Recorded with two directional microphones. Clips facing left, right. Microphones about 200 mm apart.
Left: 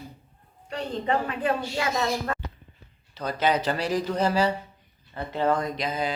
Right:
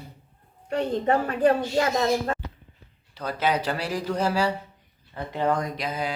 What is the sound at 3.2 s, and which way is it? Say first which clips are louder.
Speech: left 1 dB; 10° right (ahead or behind).